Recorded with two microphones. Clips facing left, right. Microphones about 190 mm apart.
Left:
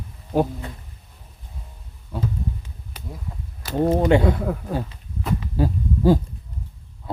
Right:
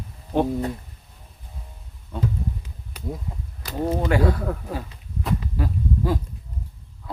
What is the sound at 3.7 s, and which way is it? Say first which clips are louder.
Speech: left 5 dB; 20° left (ahead or behind).